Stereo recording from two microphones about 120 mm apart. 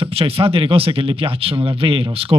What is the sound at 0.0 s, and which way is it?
Speech, 50° right (ahead or behind).